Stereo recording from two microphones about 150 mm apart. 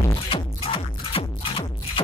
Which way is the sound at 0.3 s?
40° left (ahead or behind).